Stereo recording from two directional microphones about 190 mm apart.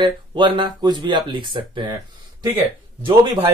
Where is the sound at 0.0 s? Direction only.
25° right (ahead or behind).